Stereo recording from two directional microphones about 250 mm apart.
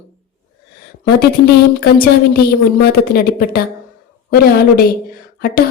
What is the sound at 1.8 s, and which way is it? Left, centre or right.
A woman's voice, left.